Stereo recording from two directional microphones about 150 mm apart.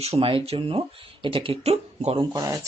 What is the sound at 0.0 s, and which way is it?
Speech, 40° right (ahead or behind).